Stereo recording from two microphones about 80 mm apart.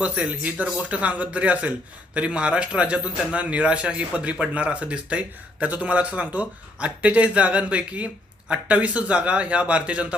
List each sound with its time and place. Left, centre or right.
0.0 s a man's voice: centre